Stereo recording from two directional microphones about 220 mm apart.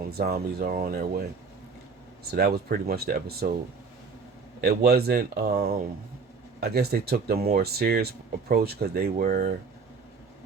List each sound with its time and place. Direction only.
0.1 s speech: 45° right (ahead or behind)
2.3 s speech: 45° right (ahead or behind)
4.6 s speech: 45° right (ahead or behind)